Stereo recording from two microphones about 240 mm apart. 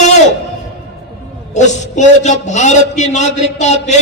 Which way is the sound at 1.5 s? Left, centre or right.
Left.